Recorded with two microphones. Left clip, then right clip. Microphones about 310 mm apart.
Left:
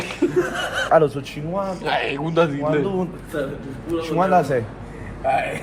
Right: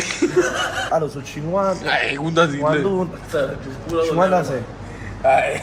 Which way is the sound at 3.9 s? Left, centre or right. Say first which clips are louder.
Right 6 dB; right.